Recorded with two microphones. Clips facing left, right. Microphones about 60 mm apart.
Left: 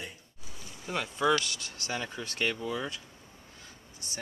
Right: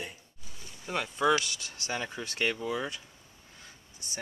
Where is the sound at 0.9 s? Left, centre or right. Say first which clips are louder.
Right 1 dB; centre.